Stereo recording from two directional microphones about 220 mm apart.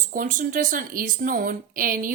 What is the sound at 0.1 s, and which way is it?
A woman's voice, 40° right (ahead or behind).